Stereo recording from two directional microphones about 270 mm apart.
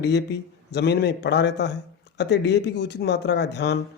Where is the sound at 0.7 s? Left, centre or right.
Left.